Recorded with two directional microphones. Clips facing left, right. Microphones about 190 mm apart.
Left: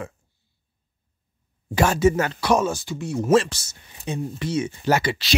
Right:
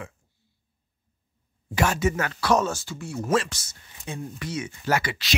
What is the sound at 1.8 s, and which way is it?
Speech, 30° left (ahead or behind).